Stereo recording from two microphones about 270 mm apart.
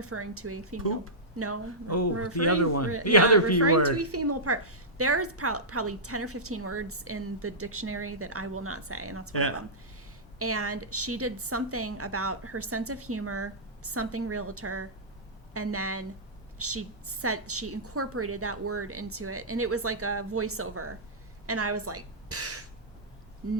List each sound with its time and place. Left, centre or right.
0.0 s speech: right
0.8 s speech: left
1.4 s a woman's voice: right
2.3 s speech: left
3.9 s a woman's voice: right
9.3 s speech: left
10.3 s a woman's voice: right